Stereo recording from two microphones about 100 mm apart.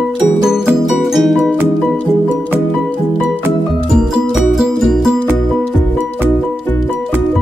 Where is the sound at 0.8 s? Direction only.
Centre (ahead or behind).